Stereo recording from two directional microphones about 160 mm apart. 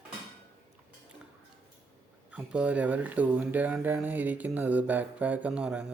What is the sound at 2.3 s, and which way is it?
Speech, 10° right (ahead or behind).